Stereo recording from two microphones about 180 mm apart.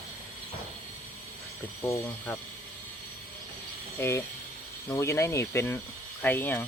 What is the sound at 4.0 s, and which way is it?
Speech, 15° left (ahead or behind).